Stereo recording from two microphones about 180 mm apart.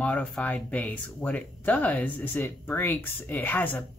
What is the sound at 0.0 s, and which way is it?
Speech, 5° left (ahead or behind).